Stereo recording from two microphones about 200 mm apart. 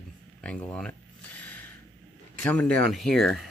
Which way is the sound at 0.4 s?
5° left (ahead or behind).